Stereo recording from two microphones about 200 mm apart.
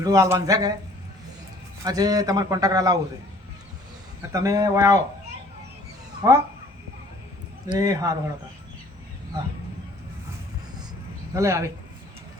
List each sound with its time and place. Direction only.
0.0 s speech: 15° right (ahead or behind)
1.8 s a man's voice: 20° right (ahead or behind)
4.3 s speech: 15° right (ahead or behind)
6.2 s speech: 20° right (ahead or behind)
7.7 s speech: 15° right (ahead or behind)
11.3 s speech: 15° right (ahead or behind)